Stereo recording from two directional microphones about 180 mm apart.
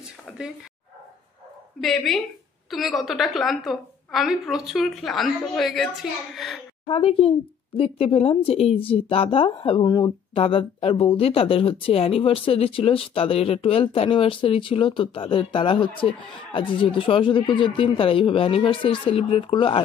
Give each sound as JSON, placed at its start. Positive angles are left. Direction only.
{"t": 1.8, "sound": "a woman's voice", "side_deg": 0}
{"t": 6.9, "sound": "speech", "side_deg": 30}